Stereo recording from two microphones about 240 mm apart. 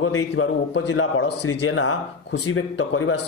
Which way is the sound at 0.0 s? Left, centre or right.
Left.